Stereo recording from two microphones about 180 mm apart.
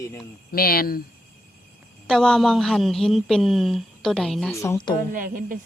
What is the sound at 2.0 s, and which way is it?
A woman's voice, 5° left (ahead or behind).